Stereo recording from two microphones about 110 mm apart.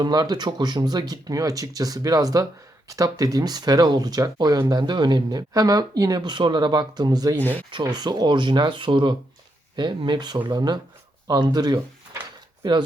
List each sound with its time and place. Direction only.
0.0 s speech: 40° right (ahead or behind)